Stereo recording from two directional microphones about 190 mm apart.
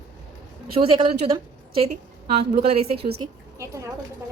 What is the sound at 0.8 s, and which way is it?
A woman's voice, 30° right (ahead or behind).